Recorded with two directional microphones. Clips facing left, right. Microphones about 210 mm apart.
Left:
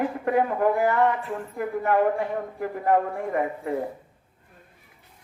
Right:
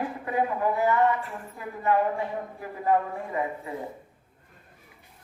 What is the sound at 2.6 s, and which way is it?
A man's voice, 60° left (ahead or behind).